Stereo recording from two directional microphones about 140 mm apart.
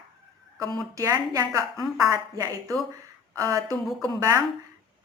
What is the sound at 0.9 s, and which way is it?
A woman's voice, 25° right (ahead or behind).